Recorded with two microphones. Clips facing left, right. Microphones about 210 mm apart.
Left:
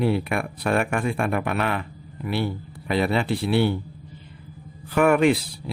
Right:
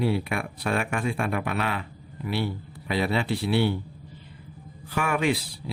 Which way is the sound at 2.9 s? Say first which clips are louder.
Left 3 dB; 55° left (ahead or behind).